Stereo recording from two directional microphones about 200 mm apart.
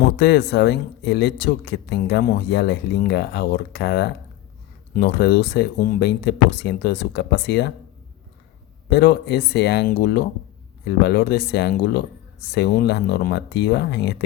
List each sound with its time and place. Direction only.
0.2 s speech: 60° left (ahead or behind)
8.9 s speech: 55° left (ahead or behind)